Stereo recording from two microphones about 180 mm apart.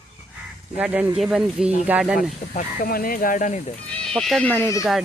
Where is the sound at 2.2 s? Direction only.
50° left (ahead or behind).